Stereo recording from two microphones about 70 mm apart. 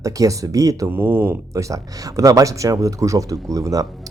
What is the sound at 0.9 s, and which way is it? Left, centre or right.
Speech, right.